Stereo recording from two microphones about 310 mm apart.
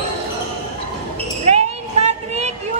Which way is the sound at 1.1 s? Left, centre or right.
Centre.